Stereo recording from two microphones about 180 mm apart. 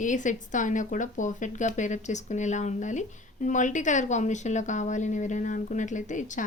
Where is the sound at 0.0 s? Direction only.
45° left (ahead or behind).